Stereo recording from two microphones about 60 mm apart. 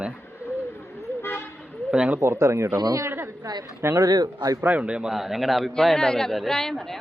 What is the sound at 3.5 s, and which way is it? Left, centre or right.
Speech, right.